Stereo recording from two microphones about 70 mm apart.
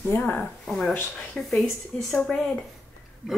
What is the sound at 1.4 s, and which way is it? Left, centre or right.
Speech, centre.